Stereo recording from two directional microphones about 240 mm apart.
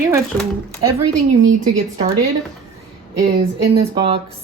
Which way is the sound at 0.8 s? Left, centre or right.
Centre.